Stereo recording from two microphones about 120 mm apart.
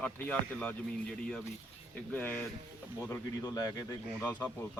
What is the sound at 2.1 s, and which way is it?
Speech, 15° left (ahead or behind).